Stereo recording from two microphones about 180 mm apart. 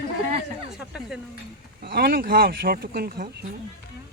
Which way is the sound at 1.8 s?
60° right (ahead or behind).